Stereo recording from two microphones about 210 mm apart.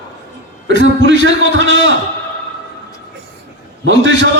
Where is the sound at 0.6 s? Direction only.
60° right (ahead or behind).